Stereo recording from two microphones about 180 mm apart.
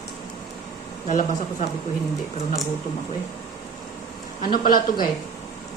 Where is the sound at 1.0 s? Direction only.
45° left (ahead or behind).